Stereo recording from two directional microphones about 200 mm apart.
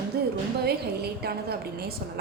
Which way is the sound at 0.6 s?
55° right (ahead or behind).